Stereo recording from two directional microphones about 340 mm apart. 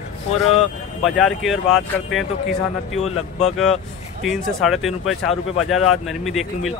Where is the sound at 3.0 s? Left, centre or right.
Centre.